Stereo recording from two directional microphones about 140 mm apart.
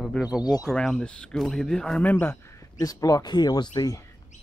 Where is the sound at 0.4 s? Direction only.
30° left (ahead or behind).